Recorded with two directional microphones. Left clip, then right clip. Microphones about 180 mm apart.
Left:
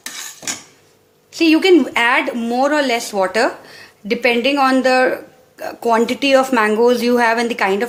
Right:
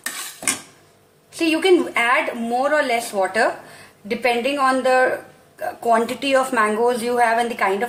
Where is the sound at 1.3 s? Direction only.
45° left (ahead or behind).